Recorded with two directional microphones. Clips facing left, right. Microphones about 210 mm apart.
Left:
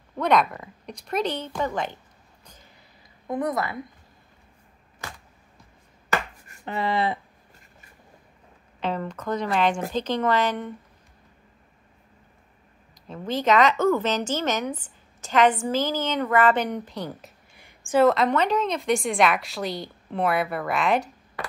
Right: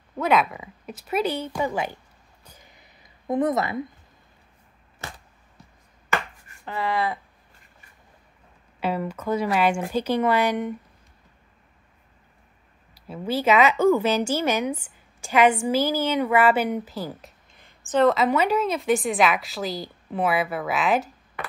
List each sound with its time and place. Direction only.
0.2 s speech: 5° right (ahead or behind)
3.3 s a woman's voice: 25° right (ahead or behind)
6.6 s speech: 20° left (ahead or behind)
8.7 s speech: 10° right (ahead or behind)
12.9 s speech: 10° right (ahead or behind)
17.6 s a sound: 10° left (ahead or behind)
18.0 s a woman's voice: 5° right (ahead or behind)